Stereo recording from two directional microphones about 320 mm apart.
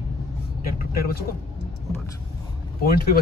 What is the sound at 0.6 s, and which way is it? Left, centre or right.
Speech, left.